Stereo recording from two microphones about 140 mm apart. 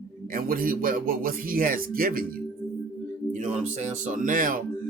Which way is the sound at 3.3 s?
60° right (ahead or behind).